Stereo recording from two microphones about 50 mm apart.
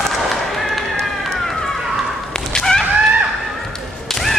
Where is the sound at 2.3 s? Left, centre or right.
Centre.